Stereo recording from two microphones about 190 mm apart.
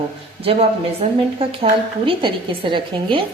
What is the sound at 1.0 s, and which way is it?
A woman's voice, 30° right (ahead or behind).